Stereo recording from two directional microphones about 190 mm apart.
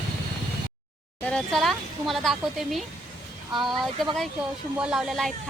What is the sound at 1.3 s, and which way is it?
Speech, 5° left (ahead or behind).